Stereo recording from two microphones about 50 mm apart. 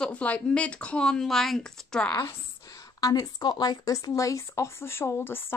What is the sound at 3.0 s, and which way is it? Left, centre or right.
Speech, left.